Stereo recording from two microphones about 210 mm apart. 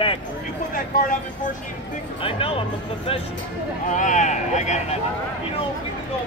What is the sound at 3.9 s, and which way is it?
Speech, 35° left (ahead or behind).